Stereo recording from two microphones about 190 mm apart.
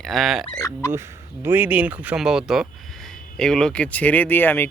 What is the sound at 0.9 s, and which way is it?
A man's voice, 15° right (ahead or behind).